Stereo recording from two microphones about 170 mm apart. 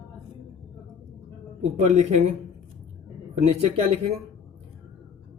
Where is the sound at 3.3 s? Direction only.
35° right (ahead or behind).